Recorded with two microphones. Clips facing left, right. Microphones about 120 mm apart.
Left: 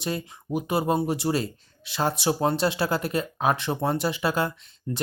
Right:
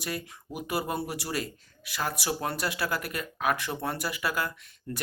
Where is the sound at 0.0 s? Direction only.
25° left (ahead or behind).